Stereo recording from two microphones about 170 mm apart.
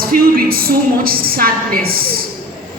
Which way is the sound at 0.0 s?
60° right (ahead or behind).